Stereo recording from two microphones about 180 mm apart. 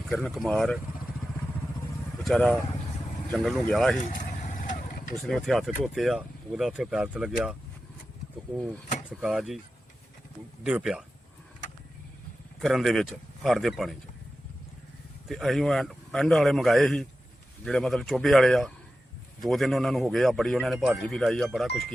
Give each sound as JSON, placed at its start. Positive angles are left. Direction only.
{"t": 0.1, "sound": "speech", "side_deg": 5}
{"t": 2.2, "sound": "speech", "side_deg": 5}
{"t": 4.5, "sound": "vehicle", "side_deg": 50}
{"t": 5.3, "sound": "speech", "side_deg": 0}
{"t": 9.0, "sound": "speech", "side_deg": -5}
{"t": 10.6, "sound": "speech", "side_deg": -5}
{"t": 12.6, "sound": "speech", "side_deg": 0}
{"t": 15.3, "sound": "speech", "side_deg": 0}